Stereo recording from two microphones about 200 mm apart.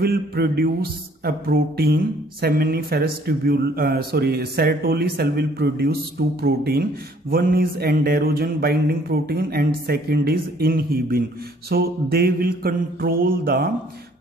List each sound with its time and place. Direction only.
0.0 s speech: 50° right (ahead or behind)